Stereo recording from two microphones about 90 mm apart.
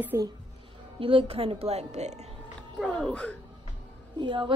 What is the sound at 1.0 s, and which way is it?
Speech, 85° right.